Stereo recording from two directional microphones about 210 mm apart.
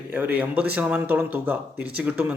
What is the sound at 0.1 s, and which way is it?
Speech, 5° right (ahead or behind).